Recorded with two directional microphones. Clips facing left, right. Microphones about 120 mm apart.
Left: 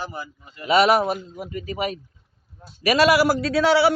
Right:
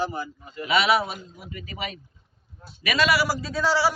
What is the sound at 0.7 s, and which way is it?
A man's voice, 40° left (ahead or behind).